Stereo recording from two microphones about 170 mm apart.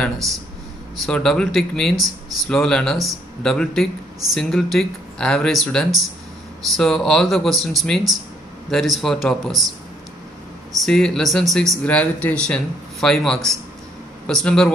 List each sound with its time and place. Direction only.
0.9 s speech: centre (ahead or behind)
10.8 s speech: 5° left (ahead or behind)